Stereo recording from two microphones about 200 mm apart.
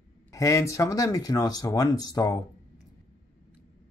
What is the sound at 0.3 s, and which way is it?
Speech, 15° left (ahead or behind).